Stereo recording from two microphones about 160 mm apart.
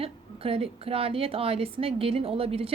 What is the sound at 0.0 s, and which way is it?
A woman's voice, 35° right (ahead or behind).